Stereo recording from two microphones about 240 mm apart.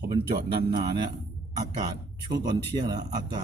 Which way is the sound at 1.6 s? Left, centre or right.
Centre.